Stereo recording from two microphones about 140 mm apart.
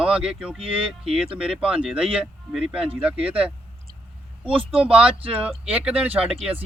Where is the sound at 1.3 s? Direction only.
5° right (ahead or behind).